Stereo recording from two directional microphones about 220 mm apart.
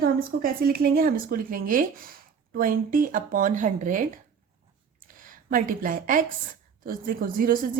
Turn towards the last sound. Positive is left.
turn(degrees=-40)  # may be behind; listen again after turning